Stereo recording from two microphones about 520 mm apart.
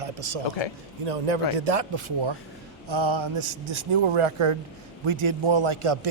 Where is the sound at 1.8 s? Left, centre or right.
Right.